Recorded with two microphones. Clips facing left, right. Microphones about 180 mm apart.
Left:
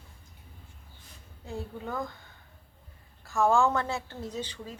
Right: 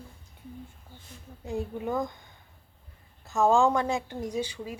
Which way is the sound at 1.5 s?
15° right (ahead or behind).